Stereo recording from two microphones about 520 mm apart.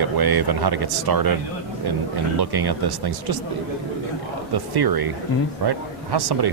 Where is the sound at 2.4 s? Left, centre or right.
Right.